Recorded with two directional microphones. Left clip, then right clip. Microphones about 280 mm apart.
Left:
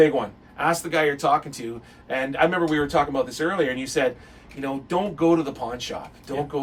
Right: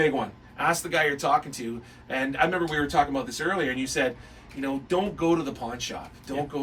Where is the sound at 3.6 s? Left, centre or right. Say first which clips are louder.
Left 3 dB; centre.